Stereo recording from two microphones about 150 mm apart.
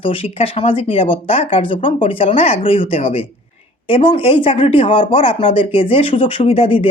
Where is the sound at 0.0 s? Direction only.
35° left (ahead or behind).